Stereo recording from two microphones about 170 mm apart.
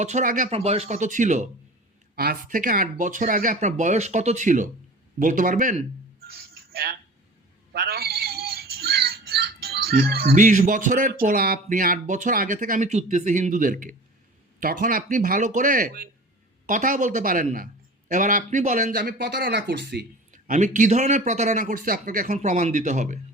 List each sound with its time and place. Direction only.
0.0 s speech: 45° right (ahead or behind)
0.5 s speech: 35° right (ahead or behind)
2.1 s speech: 65° right (ahead or behind)
7.7 s music: 65° right (ahead or behind)
10.4 s speech: 45° right (ahead or behind)
18.9 s speech: 75° right (ahead or behind)
20.3 s speech: 50° right (ahead or behind)